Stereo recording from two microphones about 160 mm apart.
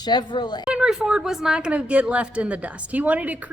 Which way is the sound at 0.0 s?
25° left (ahead or behind).